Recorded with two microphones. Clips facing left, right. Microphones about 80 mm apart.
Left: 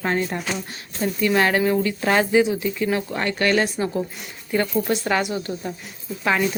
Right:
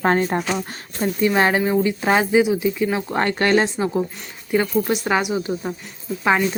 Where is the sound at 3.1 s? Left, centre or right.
Right.